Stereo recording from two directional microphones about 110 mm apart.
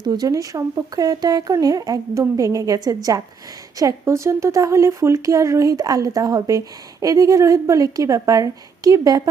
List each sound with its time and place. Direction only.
0.0 s speech: 40° right (ahead or behind)